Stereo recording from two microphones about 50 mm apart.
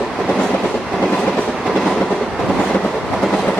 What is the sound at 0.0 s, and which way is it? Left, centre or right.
Train, centre.